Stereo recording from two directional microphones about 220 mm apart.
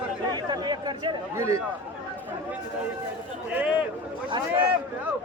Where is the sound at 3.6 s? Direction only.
5° right (ahead or behind).